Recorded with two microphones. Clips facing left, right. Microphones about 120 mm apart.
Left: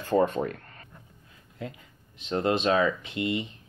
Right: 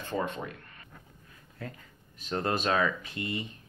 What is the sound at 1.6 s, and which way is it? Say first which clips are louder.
Speech: left 4 dB; 20° left (ahead or behind).